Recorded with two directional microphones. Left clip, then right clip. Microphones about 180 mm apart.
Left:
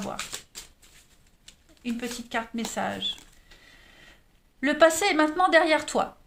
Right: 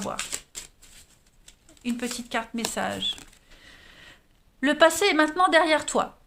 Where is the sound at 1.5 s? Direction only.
30° right (ahead or behind).